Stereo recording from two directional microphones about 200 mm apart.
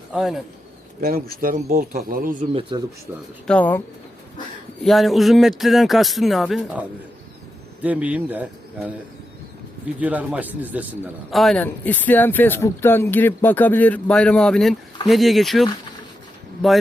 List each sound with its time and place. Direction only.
0.1 s speech: centre (ahead or behind)
1.0 s a man's voice: 45° right (ahead or behind); by 2.8 s 25° right (ahead or behind)
3.4 s a man's voice: 5° left (ahead or behind)
10.0 s a man's voice: 5° right (ahead or behind)